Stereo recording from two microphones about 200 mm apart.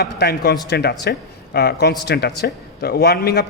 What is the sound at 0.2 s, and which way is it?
A man's voice, 55° left (ahead or behind).